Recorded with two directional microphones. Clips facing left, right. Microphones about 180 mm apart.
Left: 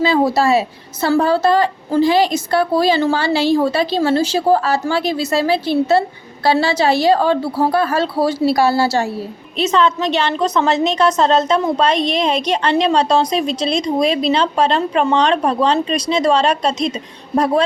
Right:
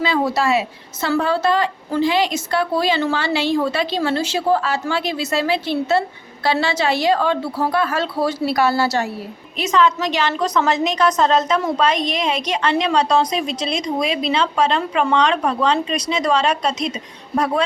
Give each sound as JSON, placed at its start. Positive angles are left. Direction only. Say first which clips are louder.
{"t": 0.0, "sound": "a woman's voice", "louder": "left 4 dB", "side_deg": 35}